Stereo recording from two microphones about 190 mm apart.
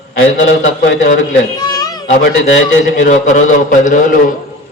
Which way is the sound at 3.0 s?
40° left (ahead or behind).